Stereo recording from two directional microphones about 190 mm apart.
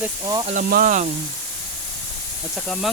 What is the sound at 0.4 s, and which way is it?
Speech, 45° right (ahead or behind).